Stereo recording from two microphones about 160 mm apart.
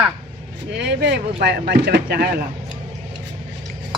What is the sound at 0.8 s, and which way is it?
Speech, 90° right.